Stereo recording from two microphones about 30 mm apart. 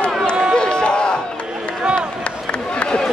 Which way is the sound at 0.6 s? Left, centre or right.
Left.